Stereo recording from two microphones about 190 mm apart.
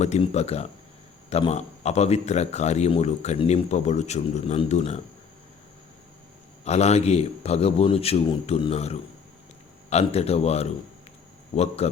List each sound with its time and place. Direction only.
0.0 s a man's voice: 35° left (ahead or behind)
6.7 s a man's voice: 35° left (ahead or behind)